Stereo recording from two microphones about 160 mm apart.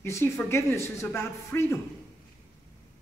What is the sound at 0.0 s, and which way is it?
Speech, 15° left (ahead or behind).